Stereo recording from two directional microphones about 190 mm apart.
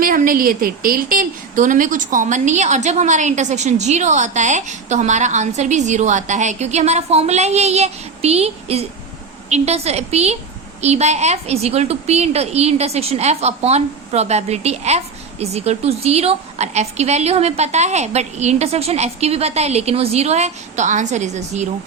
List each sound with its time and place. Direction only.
0.0 s a woman's voice: 50° right (ahead or behind)